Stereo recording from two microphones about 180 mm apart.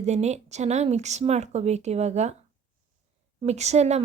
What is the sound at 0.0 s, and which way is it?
Speech, 40° right (ahead or behind).